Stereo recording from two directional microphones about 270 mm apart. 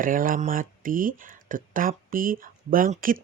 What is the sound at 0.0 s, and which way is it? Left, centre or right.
Speech, right.